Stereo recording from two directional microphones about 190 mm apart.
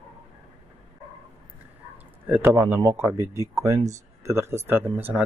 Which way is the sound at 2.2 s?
10° right (ahead or behind).